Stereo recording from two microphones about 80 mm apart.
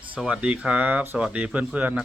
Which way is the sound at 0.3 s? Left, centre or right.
Centre.